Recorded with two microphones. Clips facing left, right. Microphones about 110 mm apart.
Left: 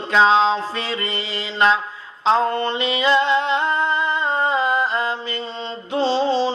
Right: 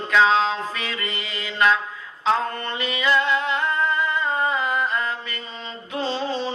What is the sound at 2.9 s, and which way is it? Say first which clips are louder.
Music: left 3 dB; 25° left (ahead or behind).